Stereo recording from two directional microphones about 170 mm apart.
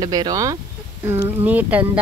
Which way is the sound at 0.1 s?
20° right (ahead or behind).